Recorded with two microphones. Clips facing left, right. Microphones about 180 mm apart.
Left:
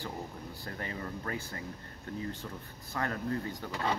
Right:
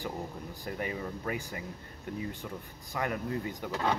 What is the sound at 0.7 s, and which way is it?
Speech, 15° right (ahead or behind).